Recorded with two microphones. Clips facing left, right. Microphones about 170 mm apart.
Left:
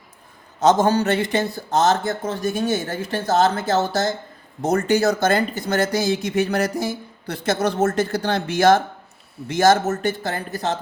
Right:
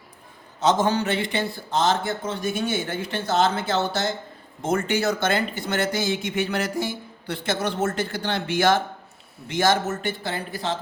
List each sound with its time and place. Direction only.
0.6 s speech: 45° left (ahead or behind)